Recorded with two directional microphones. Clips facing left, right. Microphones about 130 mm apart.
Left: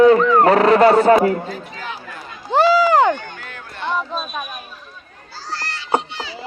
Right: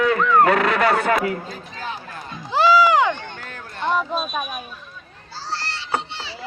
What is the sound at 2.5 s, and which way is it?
Run, 50° left (ahead or behind).